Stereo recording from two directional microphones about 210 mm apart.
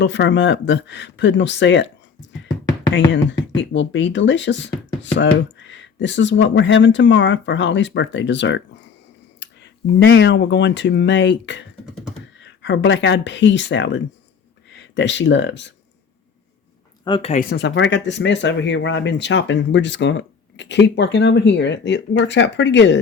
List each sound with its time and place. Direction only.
0.0 s speech: 55° left (ahead or behind)
3.1 s speech: 60° left (ahead or behind)
17.0 s speech: 25° left (ahead or behind)
17.5 s speech: 55° left (ahead or behind)